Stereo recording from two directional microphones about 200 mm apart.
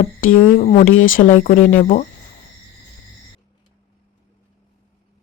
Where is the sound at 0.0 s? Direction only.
40° left (ahead or behind).